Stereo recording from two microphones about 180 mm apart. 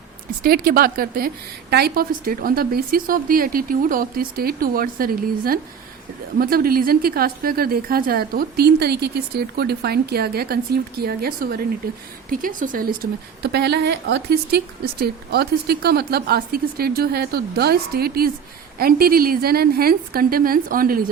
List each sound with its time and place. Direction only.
0.4 s a woman's voice: 55° right (ahead or behind)